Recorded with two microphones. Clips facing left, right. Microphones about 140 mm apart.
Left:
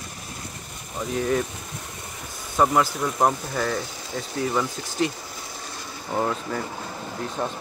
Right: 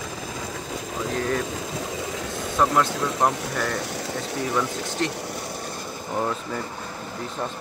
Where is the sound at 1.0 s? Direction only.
90° right.